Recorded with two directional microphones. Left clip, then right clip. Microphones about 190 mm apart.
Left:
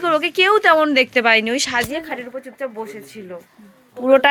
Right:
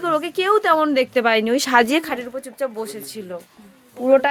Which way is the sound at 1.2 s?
20° right (ahead or behind).